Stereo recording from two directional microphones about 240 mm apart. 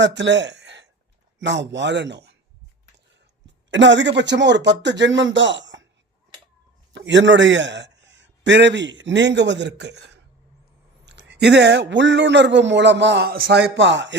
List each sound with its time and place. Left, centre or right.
0.0 s speech: right
3.4 s speech: right
6.9 s a man's voice: right